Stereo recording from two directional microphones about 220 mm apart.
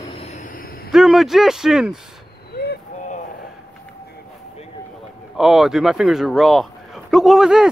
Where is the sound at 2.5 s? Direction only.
45° left (ahead or behind).